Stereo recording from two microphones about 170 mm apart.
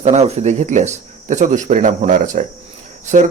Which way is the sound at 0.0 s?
40° right (ahead or behind).